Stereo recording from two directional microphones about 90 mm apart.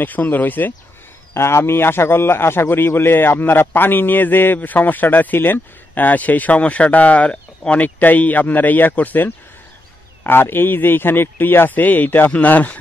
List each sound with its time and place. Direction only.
0.0 s a man's voice: 20° left (ahead or behind)